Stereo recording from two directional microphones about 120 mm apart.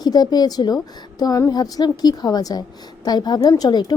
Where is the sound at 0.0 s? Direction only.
35° left (ahead or behind).